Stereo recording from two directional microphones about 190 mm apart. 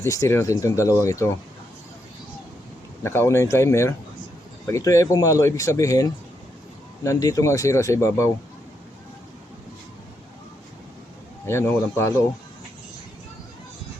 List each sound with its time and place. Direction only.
0.0 s speech: 15° left (ahead or behind)
3.0 s speech: 15° left (ahead or behind)
11.4 s speech: 10° left (ahead or behind)